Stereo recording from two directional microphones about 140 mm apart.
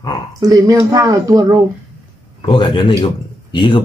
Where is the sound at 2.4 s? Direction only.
35° left (ahead or behind).